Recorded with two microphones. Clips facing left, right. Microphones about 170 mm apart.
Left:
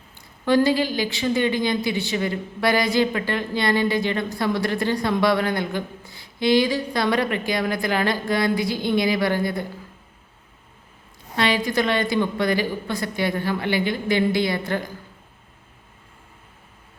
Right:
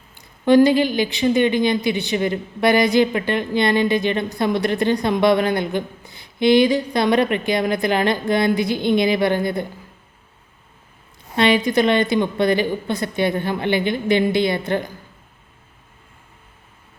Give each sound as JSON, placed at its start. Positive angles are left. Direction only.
{"t": 0.4, "sound": "a woman's voice", "side_deg": -20}
{"t": 11.3, "sound": "a woman's voice", "side_deg": -20}